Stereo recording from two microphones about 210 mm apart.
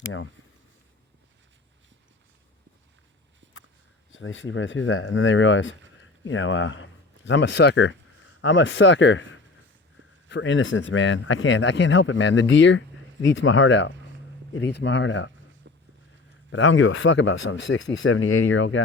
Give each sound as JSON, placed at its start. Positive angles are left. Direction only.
{"t": 0.0, "sound": "speech", "side_deg": 70}
{"t": 3.4, "sound": "a sound", "side_deg": -60}
{"t": 4.1, "sound": "speech", "side_deg": 65}
{"t": 10.2, "sound": "speech", "side_deg": 60}
{"t": 15.6, "sound": "vehicle", "side_deg": -60}
{"t": 16.5, "sound": "speech", "side_deg": 65}